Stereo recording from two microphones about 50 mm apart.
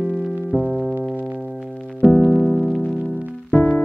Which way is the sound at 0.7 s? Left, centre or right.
Centre.